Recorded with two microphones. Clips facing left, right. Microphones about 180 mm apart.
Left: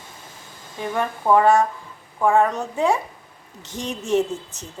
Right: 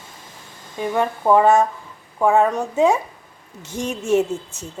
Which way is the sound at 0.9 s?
15° right (ahead or behind).